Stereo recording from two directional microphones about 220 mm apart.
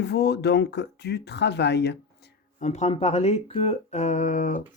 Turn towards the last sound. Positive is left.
turn(degrees=35)  # may be behind; listen again after turning